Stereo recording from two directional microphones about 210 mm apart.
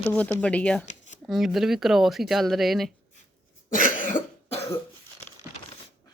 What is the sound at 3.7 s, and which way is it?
Cough, 40° left (ahead or behind).